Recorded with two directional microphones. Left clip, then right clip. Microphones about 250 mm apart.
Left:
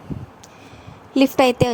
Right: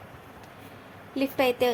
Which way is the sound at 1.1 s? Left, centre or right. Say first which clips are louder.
Left 9 dB; left.